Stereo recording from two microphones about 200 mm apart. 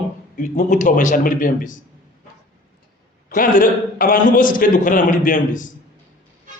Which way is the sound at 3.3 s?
45° left (ahead or behind).